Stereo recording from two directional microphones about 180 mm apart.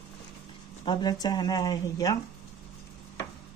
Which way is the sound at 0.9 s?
25° left (ahead or behind).